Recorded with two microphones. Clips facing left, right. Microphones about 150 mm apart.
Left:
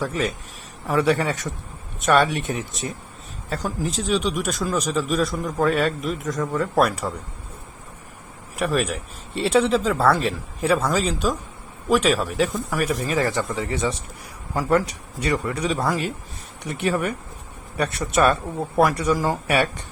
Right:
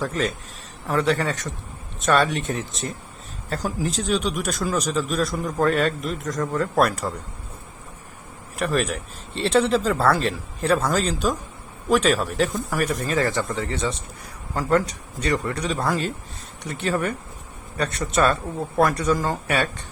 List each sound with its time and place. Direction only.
0.0 s speech: 10° left (ahead or behind)
3.5 s speech: centre (ahead or behind)
8.5 s speech: 5° left (ahead or behind)
13.1 s speech: 15° left (ahead or behind)
16.6 s speech: 15° left (ahead or behind)